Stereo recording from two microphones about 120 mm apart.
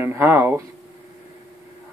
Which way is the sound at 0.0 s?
20° right (ahead or behind).